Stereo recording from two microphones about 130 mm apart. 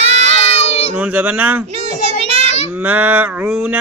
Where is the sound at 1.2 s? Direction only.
15° right (ahead or behind).